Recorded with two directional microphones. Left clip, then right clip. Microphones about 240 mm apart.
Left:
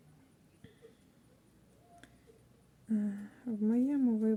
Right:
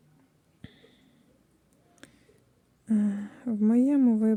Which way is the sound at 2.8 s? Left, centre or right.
Right.